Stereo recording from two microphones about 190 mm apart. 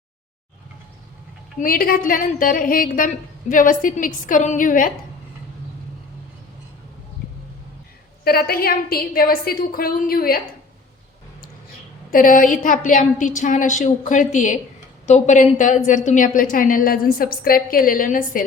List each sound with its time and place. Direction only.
1.5 s a woman's voice: 50° left (ahead or behind)
8.2 s a woman's voice: 55° left (ahead or behind)
12.1 s a woman's voice: 45° left (ahead or behind)